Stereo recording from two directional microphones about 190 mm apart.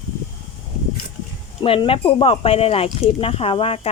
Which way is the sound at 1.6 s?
30° left (ahead or behind).